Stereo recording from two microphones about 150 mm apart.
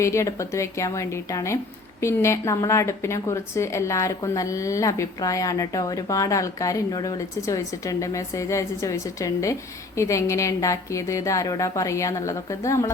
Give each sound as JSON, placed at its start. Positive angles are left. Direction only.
{"t": 0.0, "sound": "a woman's voice", "side_deg": 20}